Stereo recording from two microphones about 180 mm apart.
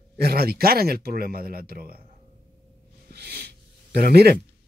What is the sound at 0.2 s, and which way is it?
Speech, 60° right (ahead or behind).